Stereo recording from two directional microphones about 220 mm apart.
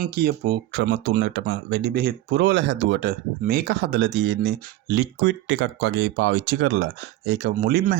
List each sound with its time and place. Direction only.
0.0 s speech: 45° right (ahead or behind)